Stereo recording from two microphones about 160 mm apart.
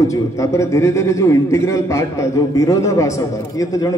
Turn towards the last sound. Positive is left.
turn(degrees=20)  # may be behind; listen again after turning